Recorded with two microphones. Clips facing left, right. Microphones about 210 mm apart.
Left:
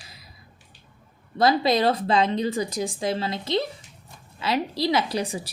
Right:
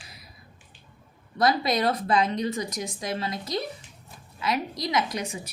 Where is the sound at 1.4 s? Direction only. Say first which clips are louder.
Left 3 dB; 30° left (ahead or behind).